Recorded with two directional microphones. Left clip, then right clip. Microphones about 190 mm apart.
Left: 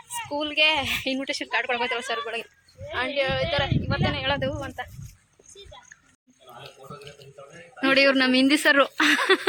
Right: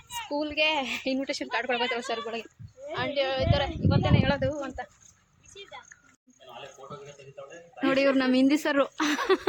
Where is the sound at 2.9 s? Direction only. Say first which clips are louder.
Left 3 dB; 25° left (ahead or behind).